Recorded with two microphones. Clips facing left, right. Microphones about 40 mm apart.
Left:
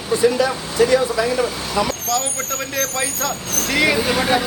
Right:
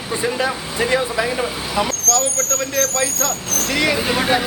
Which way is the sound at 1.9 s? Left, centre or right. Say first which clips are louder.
Right 2 dB; centre.